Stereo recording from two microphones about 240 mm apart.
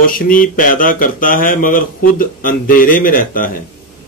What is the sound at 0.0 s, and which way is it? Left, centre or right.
Speech, left.